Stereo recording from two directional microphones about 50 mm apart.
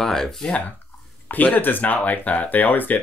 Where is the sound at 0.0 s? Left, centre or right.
Centre.